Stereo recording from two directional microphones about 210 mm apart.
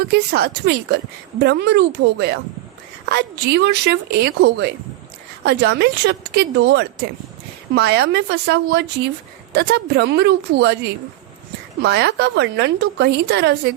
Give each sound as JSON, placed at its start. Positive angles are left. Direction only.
{"t": 0.1, "sound": "a woman's voice", "side_deg": -50}
{"t": 11.8, "sound": "a woman's voice", "side_deg": -50}